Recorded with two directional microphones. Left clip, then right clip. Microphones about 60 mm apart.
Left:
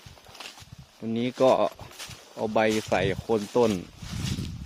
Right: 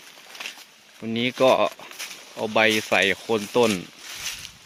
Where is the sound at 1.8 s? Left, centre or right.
Centre.